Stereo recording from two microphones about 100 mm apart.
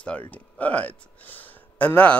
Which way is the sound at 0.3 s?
15° left (ahead or behind).